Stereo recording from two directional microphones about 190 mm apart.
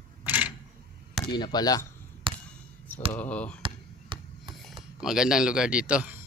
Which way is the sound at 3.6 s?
25° right (ahead or behind).